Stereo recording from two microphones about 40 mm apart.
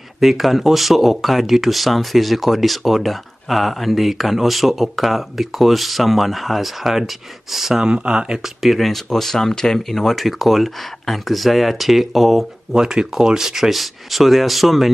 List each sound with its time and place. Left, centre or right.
0.2 s speech: centre
7.8 s speech: right
8.6 s speech: centre
12.7 s speech: centre